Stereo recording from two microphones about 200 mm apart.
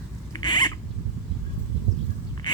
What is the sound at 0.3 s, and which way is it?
Rodents, 20° left (ahead or behind).